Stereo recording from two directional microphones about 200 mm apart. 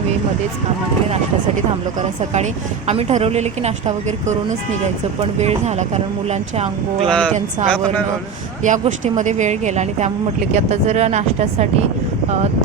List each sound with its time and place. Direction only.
2.0 s a woman's voice: 35° right (ahead or behind)
7.1 s speech: 5° left (ahead or behind)
8.6 s a woman's voice: 40° right (ahead or behind)